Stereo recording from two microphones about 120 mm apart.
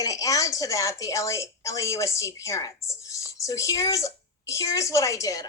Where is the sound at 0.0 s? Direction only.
30° left (ahead or behind).